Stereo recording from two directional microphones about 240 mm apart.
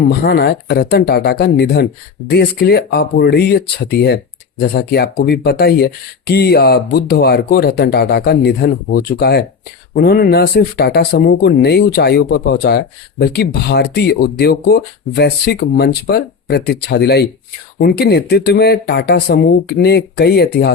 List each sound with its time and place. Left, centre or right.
0.1 s speech: left